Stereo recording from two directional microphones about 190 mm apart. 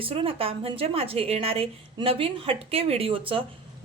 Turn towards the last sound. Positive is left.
turn(degrees=-30)  # may be behind; listen again after turning